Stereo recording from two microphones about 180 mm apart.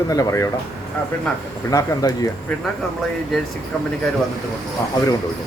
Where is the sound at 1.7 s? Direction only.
20° left (ahead or behind).